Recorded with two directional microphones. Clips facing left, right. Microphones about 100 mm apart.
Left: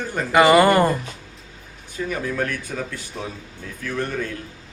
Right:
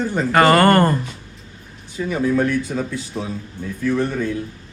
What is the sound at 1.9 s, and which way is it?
A man's voice, 15° right (ahead or behind).